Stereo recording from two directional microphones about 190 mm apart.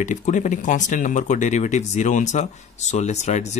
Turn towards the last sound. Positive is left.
turn(degrees=35)  # may be behind; listen again after turning